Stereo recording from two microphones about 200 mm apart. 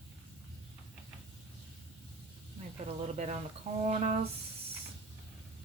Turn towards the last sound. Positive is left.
turn(degrees=-35)  # may be behind; listen again after turning